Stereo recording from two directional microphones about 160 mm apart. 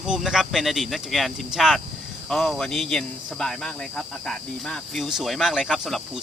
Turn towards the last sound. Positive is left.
turn(degrees=0)  # may be behind; listen again after turning